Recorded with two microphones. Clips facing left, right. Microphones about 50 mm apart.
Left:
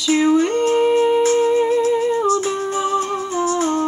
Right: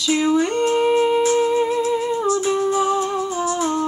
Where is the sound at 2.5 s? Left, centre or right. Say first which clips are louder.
Right 1 dB; left.